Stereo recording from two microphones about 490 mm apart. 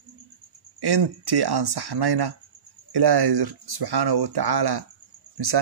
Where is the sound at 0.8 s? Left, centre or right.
Right.